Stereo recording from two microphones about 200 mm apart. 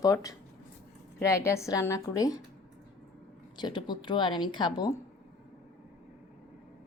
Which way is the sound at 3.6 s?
20° left (ahead or behind).